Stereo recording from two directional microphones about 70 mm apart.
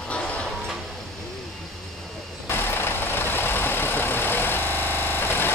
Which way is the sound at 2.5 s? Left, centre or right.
Left.